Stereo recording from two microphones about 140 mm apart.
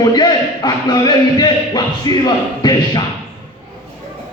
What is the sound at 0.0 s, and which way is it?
A man's voice, 30° left (ahead or behind).